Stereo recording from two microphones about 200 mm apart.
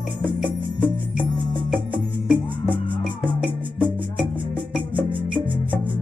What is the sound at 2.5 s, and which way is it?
Music, 25° right (ahead or behind).